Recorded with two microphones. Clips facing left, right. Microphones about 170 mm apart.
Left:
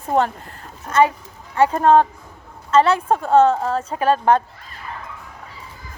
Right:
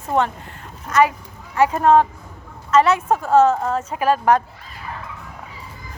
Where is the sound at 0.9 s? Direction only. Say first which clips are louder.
Left 1 dB; 30° left (ahead or behind).